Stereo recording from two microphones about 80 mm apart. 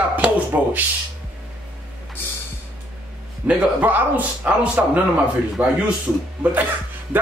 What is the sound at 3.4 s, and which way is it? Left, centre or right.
A man's voice, centre.